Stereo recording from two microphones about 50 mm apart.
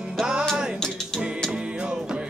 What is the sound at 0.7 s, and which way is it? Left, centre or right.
Music, centre.